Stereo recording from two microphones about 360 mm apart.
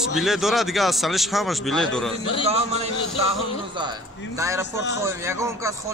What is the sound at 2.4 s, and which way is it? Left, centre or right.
Speech, centre.